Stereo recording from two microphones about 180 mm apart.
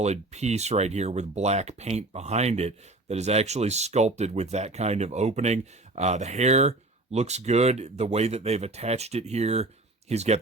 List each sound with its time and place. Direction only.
0.0 s speech: 40° right (ahead or behind)